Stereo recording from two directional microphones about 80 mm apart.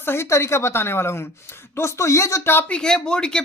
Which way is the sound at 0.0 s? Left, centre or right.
Left.